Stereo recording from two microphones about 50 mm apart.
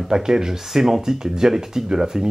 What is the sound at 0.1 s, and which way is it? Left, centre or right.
Speech, centre.